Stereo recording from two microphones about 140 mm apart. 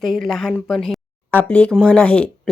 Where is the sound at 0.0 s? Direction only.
Centre (ahead or behind).